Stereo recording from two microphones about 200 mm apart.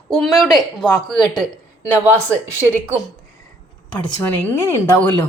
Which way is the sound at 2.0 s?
10° right (ahead or behind).